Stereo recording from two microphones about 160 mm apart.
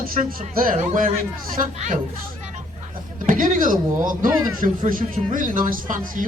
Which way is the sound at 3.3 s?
55° right (ahead or behind).